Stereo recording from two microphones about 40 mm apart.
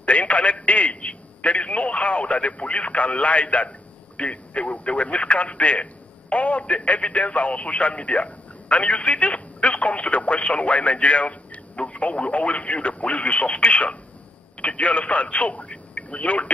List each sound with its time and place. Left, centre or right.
0.0 s telephone: left
4.2 s speech: left